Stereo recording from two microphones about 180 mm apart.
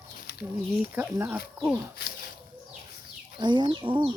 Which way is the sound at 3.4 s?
25° right (ahead or behind).